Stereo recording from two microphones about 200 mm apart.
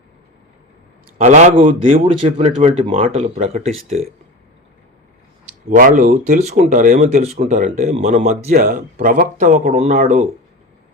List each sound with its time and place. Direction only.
1.2 s a man's voice: 35° right (ahead or behind)
5.6 s a man's voice: 40° right (ahead or behind)